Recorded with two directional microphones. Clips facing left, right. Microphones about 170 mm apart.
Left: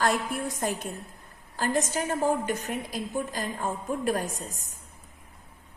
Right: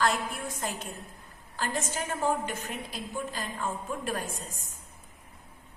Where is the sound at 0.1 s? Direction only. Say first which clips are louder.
Left 4 dB; 15° left (ahead or behind).